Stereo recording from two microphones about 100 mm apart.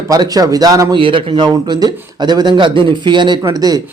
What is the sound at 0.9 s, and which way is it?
A man's voice, 60° right (ahead or behind).